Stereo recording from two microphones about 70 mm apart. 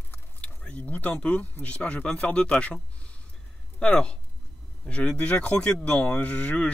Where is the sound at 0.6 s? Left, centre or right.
Centre.